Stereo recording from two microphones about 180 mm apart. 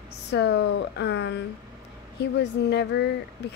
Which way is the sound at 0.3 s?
70° left (ahead or behind).